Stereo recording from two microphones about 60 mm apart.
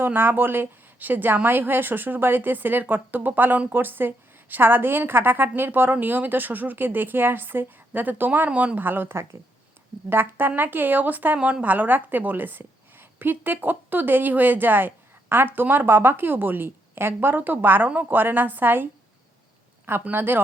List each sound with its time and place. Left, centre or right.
0.0 s a woman's voice: right